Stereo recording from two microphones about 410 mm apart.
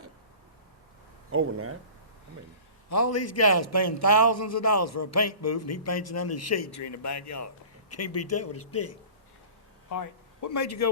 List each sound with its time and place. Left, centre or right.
1.3 s speech: right
2.9 s a man's voice: left
10.4 s a man's voice: left